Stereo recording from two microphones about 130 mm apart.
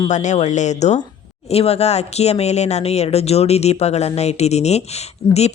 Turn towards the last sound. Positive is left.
turn(degrees=55)  # may be behind; listen again after turning